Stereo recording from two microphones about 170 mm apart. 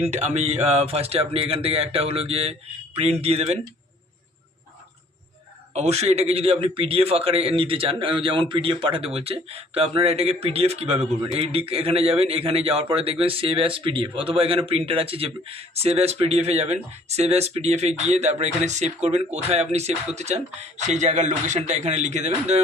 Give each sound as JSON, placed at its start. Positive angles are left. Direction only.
{"t": 0.0, "sound": "a man's voice", "side_deg": -40}
{"t": 5.7, "sound": "a man's voice", "side_deg": -40}